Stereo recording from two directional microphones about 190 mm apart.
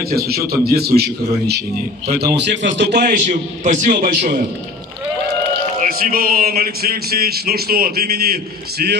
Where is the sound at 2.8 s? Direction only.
50° right (ahead or behind).